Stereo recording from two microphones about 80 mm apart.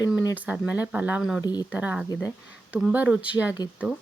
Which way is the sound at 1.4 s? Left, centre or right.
Left.